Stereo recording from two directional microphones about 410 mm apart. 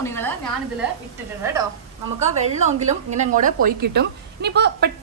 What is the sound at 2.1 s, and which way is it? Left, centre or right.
A woman's voice, centre.